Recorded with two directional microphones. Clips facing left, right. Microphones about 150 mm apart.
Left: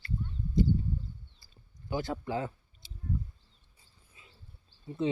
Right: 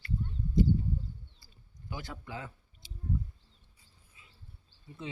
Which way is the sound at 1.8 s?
30° left (ahead or behind).